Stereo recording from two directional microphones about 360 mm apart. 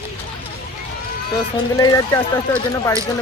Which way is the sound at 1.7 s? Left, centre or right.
Centre.